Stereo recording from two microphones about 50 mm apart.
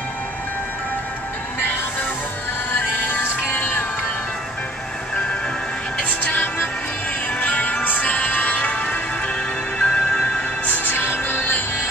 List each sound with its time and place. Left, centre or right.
3.1 s music: left
5.9 s music: left
10.9 s music: left